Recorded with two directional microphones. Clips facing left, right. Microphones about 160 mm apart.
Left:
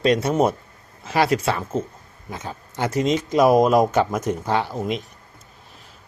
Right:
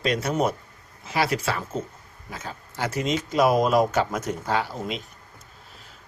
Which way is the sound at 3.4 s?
45° left (ahead or behind).